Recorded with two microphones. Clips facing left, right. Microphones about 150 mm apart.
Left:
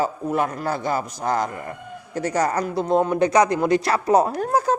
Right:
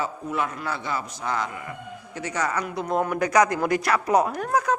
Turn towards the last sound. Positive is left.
turn(degrees=30)  # may be behind; listen again after turning